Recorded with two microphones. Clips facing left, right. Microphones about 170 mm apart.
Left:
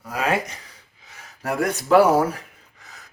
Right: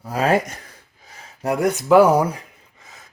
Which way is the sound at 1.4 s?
20° right (ahead or behind).